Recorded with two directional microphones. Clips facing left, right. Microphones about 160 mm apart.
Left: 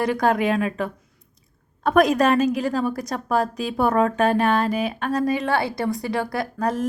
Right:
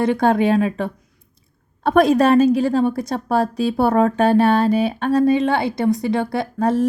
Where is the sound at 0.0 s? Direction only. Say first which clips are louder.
Right 4 dB; 25° right (ahead or behind).